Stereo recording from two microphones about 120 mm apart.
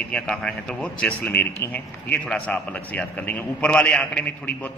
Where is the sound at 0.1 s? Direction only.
5° left (ahead or behind).